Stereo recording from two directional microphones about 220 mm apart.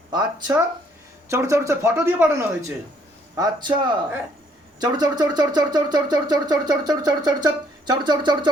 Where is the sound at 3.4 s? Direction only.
20° right (ahead or behind).